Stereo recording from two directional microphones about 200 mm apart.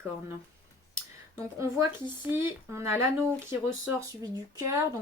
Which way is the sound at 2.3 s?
15° right (ahead or behind).